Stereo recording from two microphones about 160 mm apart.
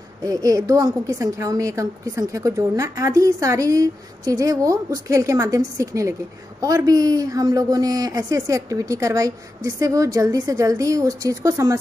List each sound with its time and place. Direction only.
0.2 s a woman's voice: 20° right (ahead or behind)